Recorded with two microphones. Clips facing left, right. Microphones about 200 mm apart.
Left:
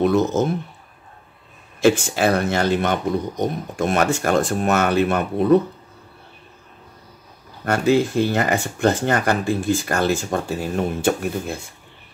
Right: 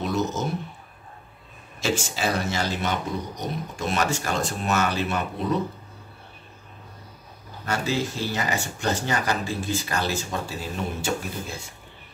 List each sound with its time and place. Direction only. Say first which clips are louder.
0.0 s speech: left 8 dB; 55° left (ahead or behind)
1.8 s speech: left 10 dB; 55° left (ahead or behind)
7.6 s speech: left 9 dB; 55° left (ahead or behind)